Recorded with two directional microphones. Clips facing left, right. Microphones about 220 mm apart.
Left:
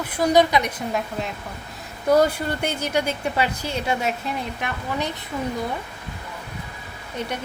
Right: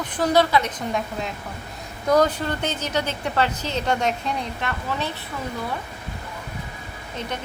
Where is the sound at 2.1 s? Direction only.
10° left (ahead or behind).